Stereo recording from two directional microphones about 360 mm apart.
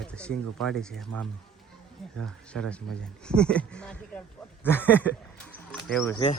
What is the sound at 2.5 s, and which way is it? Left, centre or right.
Speech, centre.